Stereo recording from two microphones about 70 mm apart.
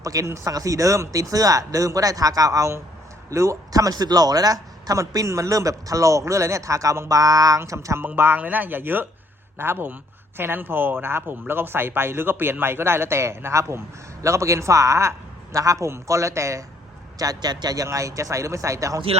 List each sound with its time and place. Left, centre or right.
0.0 s speech: right
7.2 s speech: right
8.0 s speech: right
17.2 s a man's voice: right
17.8 s speech: right